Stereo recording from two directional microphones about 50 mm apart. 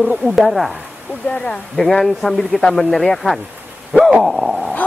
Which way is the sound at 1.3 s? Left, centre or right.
Left.